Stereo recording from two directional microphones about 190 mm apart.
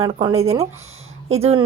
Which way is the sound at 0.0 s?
30° right (ahead or behind).